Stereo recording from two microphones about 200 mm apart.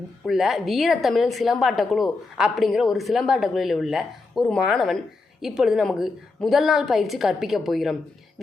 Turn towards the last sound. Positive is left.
turn(degrees=0)  # may be behind; listen again after turning